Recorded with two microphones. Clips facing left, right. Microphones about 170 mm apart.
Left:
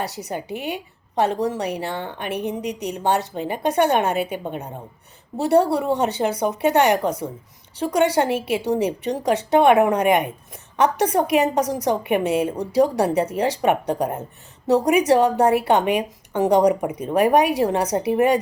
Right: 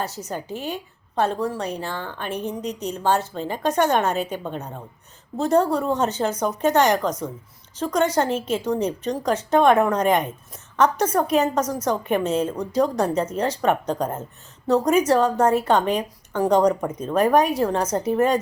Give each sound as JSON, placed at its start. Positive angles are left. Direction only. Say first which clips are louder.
{"t": 0.2, "sound": "a woman's voice", "louder": "left 2 dB", "side_deg": 15}